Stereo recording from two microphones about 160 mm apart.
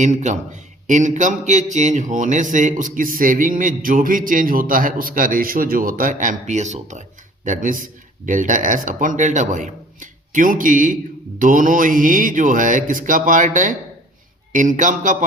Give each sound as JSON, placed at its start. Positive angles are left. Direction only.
{"t": 0.0, "sound": "a man's voice", "side_deg": -45}